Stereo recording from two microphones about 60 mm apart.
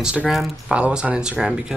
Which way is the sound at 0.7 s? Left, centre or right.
Centre.